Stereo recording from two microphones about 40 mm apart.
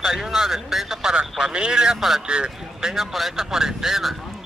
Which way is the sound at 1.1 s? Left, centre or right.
Centre.